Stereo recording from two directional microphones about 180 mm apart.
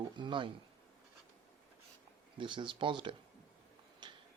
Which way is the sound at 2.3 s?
25° right (ahead or behind).